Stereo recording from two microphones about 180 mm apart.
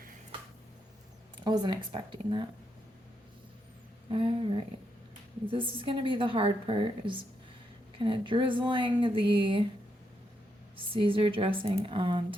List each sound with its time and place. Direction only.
1.5 s a woman's voice: 25° right (ahead or behind)
4.1 s a woman's voice: 30° right (ahead or behind)
10.8 s a woman's voice: 30° right (ahead or behind)